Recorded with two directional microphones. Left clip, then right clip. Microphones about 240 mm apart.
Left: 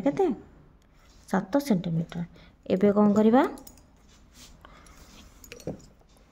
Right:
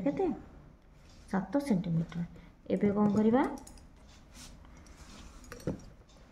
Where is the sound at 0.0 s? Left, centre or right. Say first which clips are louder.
Left 7 dB; left.